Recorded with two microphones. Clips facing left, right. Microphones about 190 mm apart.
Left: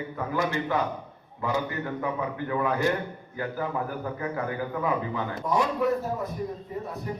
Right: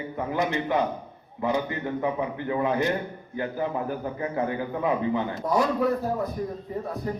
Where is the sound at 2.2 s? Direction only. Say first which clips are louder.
Right 2 dB; 25° right (ahead or behind).